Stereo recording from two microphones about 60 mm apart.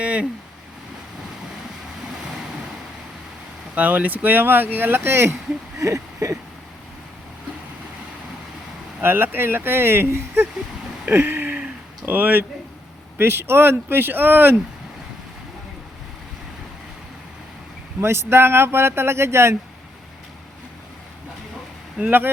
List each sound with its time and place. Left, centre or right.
0.0 s speech: right
3.8 s speech: right
5.8 s a sound: right
9.0 s speech: right
11.1 s a sound: right
12.0 s speech: right
18.0 s speech: right
22.0 s speech: right